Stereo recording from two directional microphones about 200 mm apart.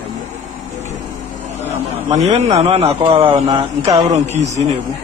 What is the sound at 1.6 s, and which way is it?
A man's voice, 35° right (ahead or behind).